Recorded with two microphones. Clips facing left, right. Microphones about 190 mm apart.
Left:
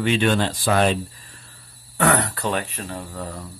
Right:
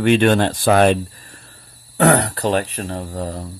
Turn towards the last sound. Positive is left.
turn(degrees=-35)  # may be behind; listen again after turning